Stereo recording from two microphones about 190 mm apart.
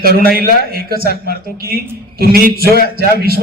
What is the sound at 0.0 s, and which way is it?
A man's voice, 50° right (ahead or behind).